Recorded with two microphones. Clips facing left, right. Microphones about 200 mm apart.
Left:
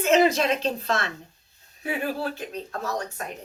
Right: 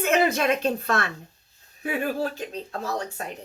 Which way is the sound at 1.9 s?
45° right (ahead or behind).